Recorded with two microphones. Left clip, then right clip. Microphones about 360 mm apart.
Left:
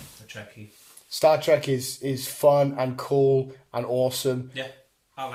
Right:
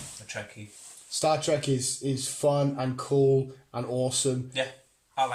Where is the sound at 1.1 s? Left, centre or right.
Centre.